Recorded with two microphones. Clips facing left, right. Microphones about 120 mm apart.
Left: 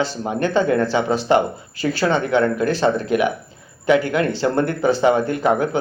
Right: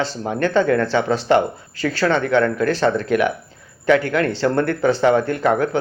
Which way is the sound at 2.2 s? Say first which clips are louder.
Even; 5° left (ahead or behind).